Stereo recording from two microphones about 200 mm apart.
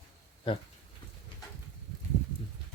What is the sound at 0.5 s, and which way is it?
Speech, 25° left (ahead or behind).